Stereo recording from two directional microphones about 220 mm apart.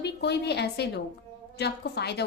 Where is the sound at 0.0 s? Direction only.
50° left (ahead or behind).